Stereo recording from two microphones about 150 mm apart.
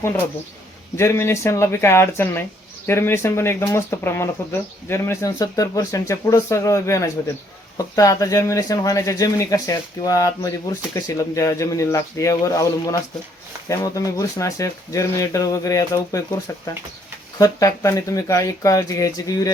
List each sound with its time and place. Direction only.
0.9 s speech: 20° left (ahead or behind)